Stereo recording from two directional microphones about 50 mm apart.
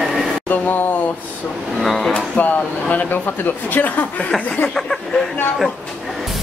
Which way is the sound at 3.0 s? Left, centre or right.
Left.